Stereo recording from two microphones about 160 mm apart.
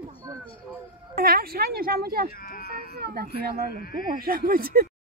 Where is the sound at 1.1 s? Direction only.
70° right (ahead or behind).